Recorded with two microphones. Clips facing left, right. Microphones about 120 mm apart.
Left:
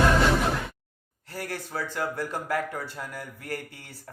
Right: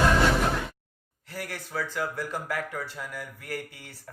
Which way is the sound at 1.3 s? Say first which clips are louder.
Left 1 dB; 30° left (ahead or behind).